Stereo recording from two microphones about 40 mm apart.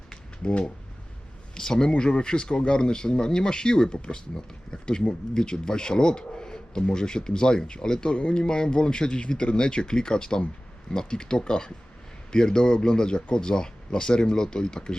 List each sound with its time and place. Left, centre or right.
0.4 s speech: left
8.1 s speech: left